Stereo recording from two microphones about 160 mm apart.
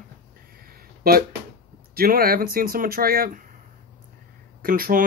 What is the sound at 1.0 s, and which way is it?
Speech, 70° right (ahead or behind).